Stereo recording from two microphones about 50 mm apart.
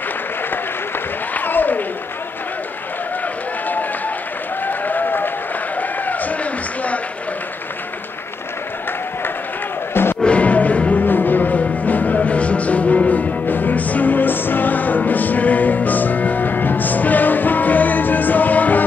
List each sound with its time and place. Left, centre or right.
0.5 s applause: left
4.6 s applause: left
5.8 s a sound: left
10.2 s music: left